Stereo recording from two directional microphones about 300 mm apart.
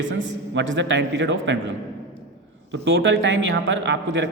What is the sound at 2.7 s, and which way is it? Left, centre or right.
A man's voice, right.